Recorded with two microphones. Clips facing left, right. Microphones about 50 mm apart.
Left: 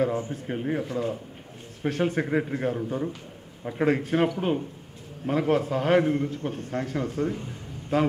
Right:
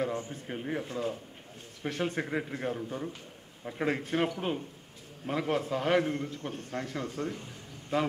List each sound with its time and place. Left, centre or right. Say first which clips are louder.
0.0 s a man's voice: left 7 dB; centre
1.9 s a man's voice: left 7 dB; centre